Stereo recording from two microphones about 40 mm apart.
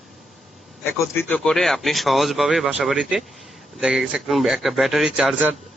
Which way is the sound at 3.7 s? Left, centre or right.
Centre.